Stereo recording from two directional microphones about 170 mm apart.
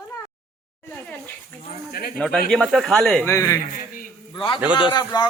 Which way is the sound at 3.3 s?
15° left (ahead or behind).